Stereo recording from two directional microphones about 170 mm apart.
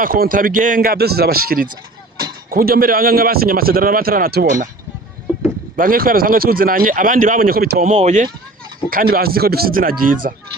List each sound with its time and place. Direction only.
0.0 s speech: 55° right (ahead or behind)
4.4 s speech: 50° right (ahead or behind)
5.7 s speech: 55° right (ahead or behind)
7.9 s speech: 45° right (ahead or behind)
8.9 s speech: 60° right (ahead or behind)